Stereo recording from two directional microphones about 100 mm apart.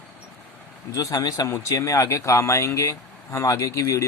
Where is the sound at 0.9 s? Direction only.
40° left (ahead or behind).